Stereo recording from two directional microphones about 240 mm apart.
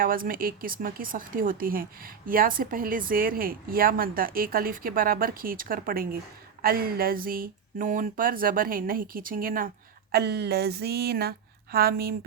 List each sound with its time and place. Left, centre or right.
0.0 s speech: right